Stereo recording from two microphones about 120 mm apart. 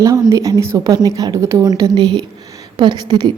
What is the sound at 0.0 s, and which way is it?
A woman's voice, 25° right (ahead or behind).